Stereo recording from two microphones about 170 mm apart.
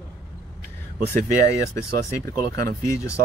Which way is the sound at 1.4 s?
20° left (ahead or behind).